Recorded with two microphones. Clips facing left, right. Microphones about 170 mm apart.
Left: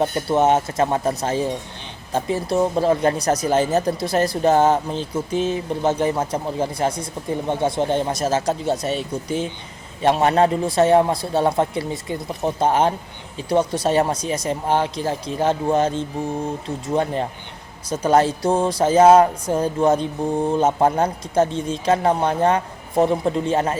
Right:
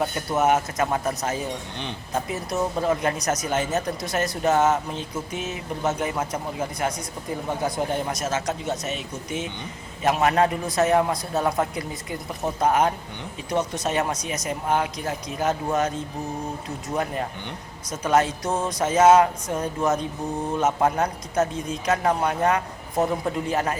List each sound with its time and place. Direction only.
0.0 s speech: 30° left (ahead or behind)